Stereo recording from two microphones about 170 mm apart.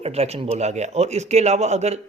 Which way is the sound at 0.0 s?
40° right (ahead or behind).